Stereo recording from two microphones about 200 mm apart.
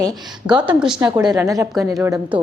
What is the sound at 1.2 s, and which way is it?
A woman's voice, 20° right (ahead or behind).